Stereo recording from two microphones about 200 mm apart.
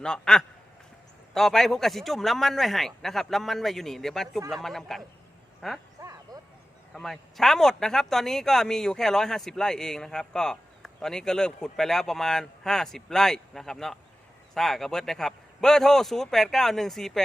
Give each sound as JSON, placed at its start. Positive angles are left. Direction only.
{"t": 0.0, "sound": "speech", "side_deg": 5}
{"t": 6.0, "sound": "a sound", "side_deg": -15}
{"t": 6.9, "sound": "speech", "side_deg": 0}